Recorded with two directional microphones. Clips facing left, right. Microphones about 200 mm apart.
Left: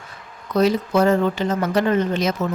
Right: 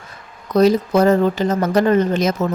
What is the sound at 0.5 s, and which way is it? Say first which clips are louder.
Speech: right 4 dB; 40° right (ahead or behind).